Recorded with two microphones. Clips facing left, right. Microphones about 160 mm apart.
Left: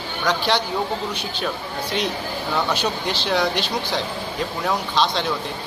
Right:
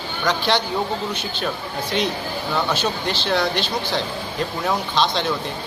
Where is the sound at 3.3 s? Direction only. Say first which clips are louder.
Even; 10° left (ahead or behind).